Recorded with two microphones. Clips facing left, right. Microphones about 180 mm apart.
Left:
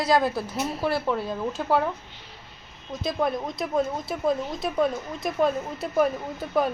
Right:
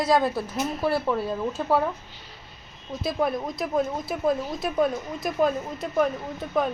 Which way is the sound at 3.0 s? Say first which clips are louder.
Even; centre (ahead or behind).